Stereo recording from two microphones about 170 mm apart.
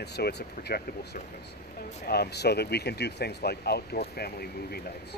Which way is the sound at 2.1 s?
70° left (ahead or behind).